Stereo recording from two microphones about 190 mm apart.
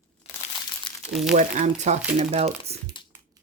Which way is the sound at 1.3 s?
40° right (ahead or behind).